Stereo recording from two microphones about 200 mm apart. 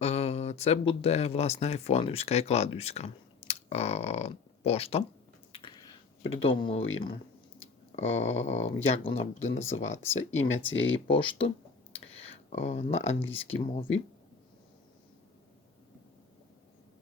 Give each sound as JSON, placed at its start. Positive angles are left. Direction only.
{"t": 0.0, "sound": "speech", "side_deg": 30}
{"t": 5.5, "sound": "a sound", "side_deg": 25}
{"t": 6.4, "sound": "speech", "side_deg": 25}
{"t": 7.9, "sound": "speech", "side_deg": 30}
{"t": 9.5, "sound": "speech", "side_deg": 75}
{"t": 9.7, "sound": "speech", "side_deg": 35}
{"t": 10.1, "sound": "speech", "side_deg": 75}
{"t": 11.1, "sound": "speech", "side_deg": 25}
{"t": 12.5, "sound": "speech", "side_deg": 35}